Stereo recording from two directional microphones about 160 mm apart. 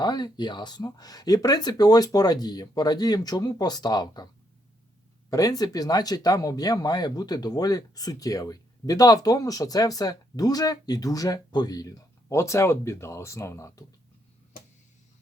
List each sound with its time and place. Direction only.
0.0 s speech: 25° left (ahead or behind)
5.3 s speech: 20° left (ahead or behind)